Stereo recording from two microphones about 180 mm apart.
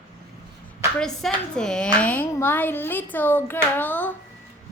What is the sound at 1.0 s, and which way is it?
A woman's voice, 5° left (ahead or behind).